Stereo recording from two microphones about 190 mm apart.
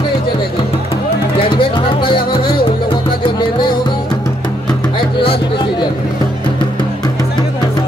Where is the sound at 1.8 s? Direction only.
25° left (ahead or behind).